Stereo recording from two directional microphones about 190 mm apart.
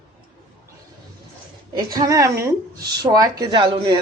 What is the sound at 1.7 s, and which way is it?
A woman's voice, 20° right (ahead or behind).